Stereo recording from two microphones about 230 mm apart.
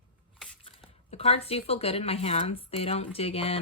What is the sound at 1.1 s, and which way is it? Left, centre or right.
Speech, left.